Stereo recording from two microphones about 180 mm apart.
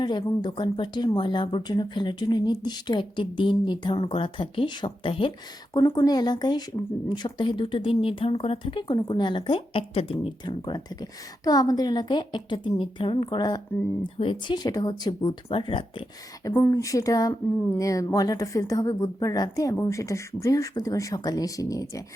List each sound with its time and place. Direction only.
0.0 s speech: 25° left (ahead or behind)
5.7 s speech: 15° left (ahead or behind)